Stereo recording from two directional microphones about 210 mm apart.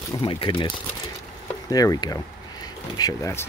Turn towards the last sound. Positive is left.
turn(degrees=15)  # may be behind; listen again after turning